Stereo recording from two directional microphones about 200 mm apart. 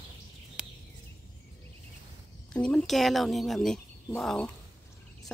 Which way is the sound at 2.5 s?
5° left (ahead or behind).